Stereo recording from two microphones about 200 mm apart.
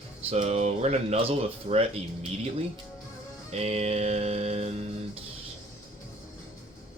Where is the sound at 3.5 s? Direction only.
30° right (ahead or behind).